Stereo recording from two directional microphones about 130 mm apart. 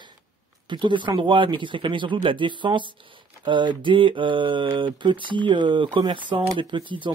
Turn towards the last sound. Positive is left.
turn(degrees=-40)  # may be behind; listen again after turning